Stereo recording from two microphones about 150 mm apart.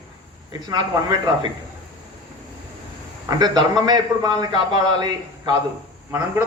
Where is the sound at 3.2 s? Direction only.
25° right (ahead or behind).